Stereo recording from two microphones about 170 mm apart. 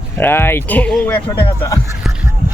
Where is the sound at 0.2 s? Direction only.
15° left (ahead or behind).